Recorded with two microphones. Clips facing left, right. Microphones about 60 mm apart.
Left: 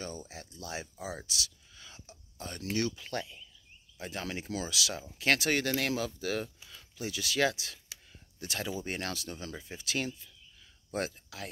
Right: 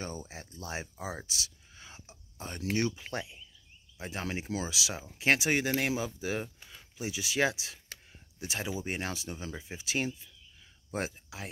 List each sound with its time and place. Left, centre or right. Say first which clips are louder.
0.0 s speech: right 1 dB; right